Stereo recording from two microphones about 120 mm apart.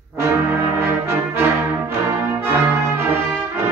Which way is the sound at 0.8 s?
20° right (ahead or behind).